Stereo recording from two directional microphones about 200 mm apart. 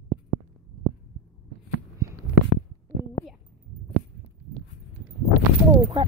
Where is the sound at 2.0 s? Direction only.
15° right (ahead or behind).